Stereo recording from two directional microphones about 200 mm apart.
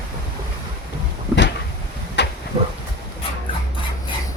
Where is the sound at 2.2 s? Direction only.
60° left (ahead or behind).